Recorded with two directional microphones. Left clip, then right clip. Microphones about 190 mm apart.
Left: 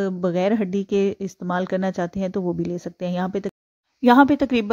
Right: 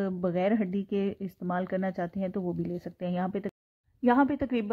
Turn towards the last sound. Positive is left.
turn(degrees=45)  # may be behind; listen again after turning